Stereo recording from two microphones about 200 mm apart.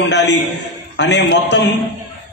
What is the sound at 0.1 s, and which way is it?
A man's voice, 60° left (ahead or behind).